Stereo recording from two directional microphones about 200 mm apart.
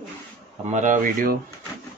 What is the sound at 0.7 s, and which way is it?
Speech, 40° right (ahead or behind).